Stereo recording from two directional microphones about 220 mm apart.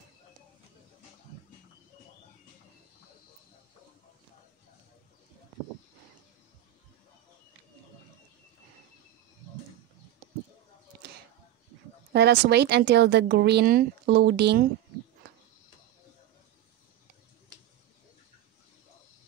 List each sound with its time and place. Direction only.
12.1 s speech: 50° right (ahead or behind)